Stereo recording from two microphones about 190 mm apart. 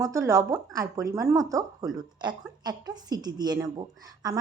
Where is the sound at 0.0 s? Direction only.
15° right (ahead or behind).